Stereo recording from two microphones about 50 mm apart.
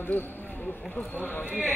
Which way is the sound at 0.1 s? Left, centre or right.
Left.